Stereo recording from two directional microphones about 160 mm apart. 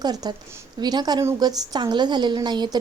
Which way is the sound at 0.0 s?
25° right (ahead or behind).